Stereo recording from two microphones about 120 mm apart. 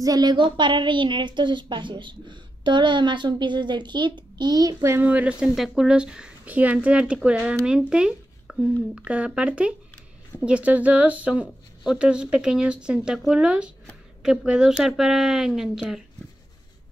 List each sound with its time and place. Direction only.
0.0 s a woman's voice: 35° right (ahead or behind); by 7.8 s 10° right (ahead or behind)
7.9 s a sound: 5° right (ahead or behind)
8.9 s a woman's voice: 10° right (ahead or behind)